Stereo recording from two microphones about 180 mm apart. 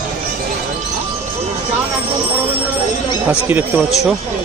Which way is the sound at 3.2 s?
10° right (ahead or behind).